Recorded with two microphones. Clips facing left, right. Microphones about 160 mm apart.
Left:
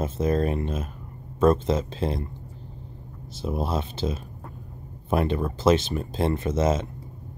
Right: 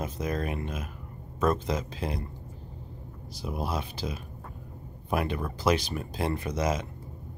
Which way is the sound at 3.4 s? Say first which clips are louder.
Left 5 dB; 25° left (ahead or behind).